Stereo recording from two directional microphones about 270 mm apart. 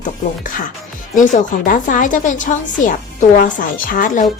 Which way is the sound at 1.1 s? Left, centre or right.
Left.